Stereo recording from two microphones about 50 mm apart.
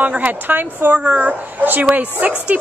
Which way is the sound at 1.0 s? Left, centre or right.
Right.